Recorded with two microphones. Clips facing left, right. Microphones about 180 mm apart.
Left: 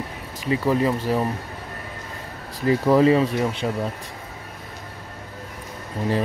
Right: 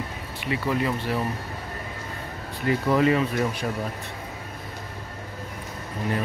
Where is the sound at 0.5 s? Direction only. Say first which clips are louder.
Left 5 dB; 35° left (ahead or behind).